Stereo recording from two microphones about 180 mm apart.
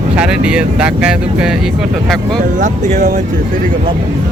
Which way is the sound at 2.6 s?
40° right (ahead or behind).